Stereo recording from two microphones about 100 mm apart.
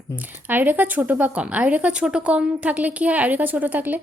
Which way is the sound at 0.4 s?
20° right (ahead or behind).